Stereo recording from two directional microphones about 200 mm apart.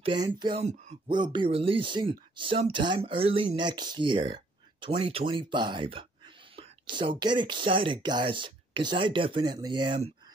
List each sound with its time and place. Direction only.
0.0 s speech: 25° right (ahead or behind)
0.7 s speech: 35° right (ahead or behind)
1.1 s speech: 20° right (ahead or behind)